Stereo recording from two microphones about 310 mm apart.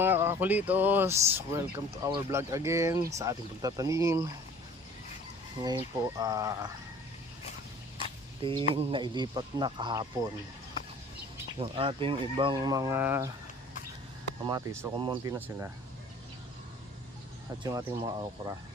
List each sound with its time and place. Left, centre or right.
0.0 s speech: centre
6.0 s speech: centre
8.4 s speech: centre
11.6 s speech: centre
14.4 s speech: centre
17.6 s speech: centre